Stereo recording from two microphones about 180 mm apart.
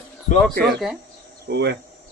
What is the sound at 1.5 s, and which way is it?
Speech, 70° right (ahead or behind).